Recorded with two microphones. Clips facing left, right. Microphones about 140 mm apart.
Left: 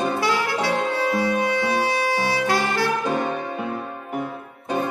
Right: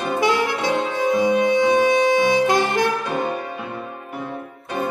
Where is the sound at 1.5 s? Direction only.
15° right (ahead or behind).